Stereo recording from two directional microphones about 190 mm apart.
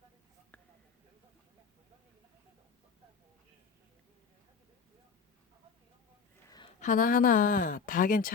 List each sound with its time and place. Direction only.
6.7 s speech: 45° left (ahead or behind)